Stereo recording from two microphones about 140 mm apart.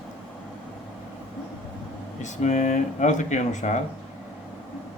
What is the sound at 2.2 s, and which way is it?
Speech, 60° left (ahead or behind).